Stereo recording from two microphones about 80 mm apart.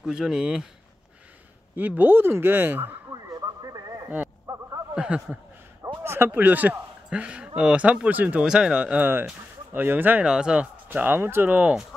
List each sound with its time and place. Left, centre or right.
0.0 s speech: centre
1.8 s speech: right
3.1 s a sound: right
4.9 s speech: centre
6.0 s speech: right
8.5 s speech: centre
9.1 s speech: right
10.2 s speech: centre
10.9 s speech: right